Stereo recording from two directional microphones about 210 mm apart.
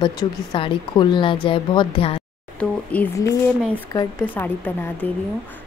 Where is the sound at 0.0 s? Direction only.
25° left (ahead or behind).